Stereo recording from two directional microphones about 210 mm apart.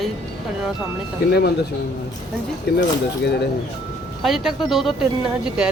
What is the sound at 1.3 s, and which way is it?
Speech, 50° left (ahead or behind).